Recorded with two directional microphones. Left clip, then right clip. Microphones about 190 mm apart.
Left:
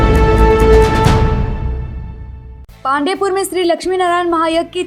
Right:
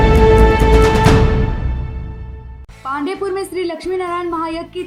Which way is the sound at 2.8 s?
40° left (ahead or behind).